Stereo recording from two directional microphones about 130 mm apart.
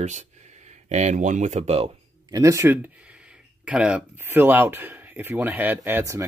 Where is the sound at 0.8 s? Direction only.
60° right (ahead or behind).